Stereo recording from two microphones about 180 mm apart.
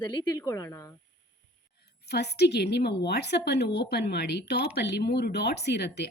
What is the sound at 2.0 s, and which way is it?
A woman's voice, 65° left (ahead or behind).